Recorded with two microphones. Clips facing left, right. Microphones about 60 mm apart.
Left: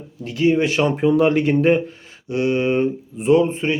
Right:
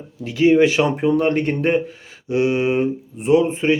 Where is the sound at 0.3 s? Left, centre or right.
Right.